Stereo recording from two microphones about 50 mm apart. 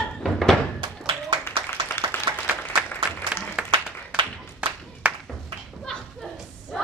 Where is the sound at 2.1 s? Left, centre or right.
Left.